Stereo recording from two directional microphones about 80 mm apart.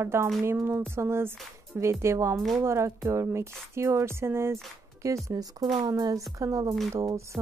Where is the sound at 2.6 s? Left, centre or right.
Right.